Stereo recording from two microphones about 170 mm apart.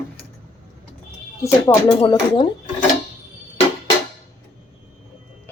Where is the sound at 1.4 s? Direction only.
10° left (ahead or behind).